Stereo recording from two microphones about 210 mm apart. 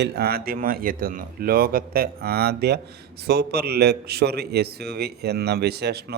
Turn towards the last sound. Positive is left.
turn(degrees=-50)  # may be behind; listen again after turning